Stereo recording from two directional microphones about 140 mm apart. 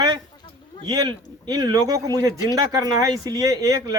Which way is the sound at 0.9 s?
30° right (ahead or behind).